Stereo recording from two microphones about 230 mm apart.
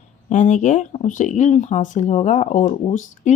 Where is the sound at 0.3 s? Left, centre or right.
Left.